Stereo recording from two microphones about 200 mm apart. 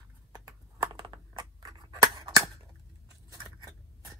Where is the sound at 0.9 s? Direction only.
20° right (ahead or behind).